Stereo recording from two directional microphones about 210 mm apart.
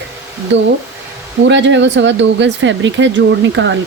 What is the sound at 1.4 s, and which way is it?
Speech, 60° right (ahead or behind).